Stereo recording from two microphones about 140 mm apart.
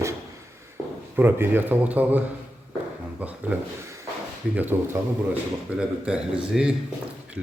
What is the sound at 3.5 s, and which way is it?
Speech, 10° right (ahead or behind).